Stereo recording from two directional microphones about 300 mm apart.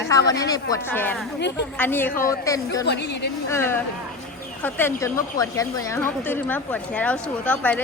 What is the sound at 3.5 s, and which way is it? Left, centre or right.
Speech, centre.